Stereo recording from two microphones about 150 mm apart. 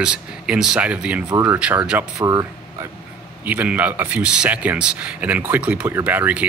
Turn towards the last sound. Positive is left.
turn(degrees=-10)  # may be behind; listen again after turning